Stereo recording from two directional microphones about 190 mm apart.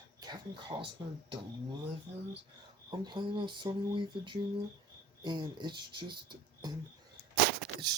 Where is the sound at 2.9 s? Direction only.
25° right (ahead or behind).